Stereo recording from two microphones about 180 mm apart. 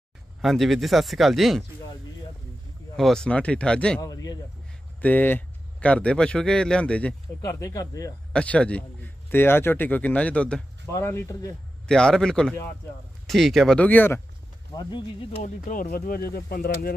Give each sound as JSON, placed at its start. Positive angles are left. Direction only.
{"t": 0.4, "sound": "speech", "side_deg": 0}
{"t": 3.0, "sound": "speech", "side_deg": 5}
{"t": 4.0, "sound": "speech", "side_deg": 20}
{"t": 5.0, "sound": "a man's voice", "side_deg": 10}
{"t": 7.4, "sound": "speech", "side_deg": 20}
{"t": 8.3, "sound": "a man's voice", "side_deg": 5}
{"t": 11.9, "sound": "speech", "side_deg": 5}
{"t": 14.7, "sound": "speech", "side_deg": 25}
{"t": 15.4, "sound": "speech", "side_deg": 50}